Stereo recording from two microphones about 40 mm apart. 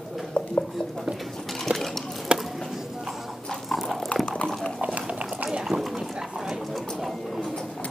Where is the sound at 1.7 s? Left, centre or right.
Centre.